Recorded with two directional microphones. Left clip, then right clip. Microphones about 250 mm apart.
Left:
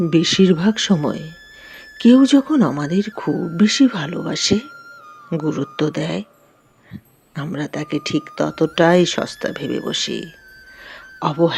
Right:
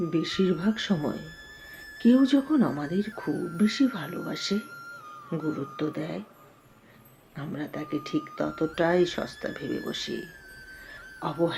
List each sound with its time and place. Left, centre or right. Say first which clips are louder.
0.1 s speech: left 14 dB; left
7.3 s speech: left 9 dB; left
10.8 s a sound: left 11 dB; left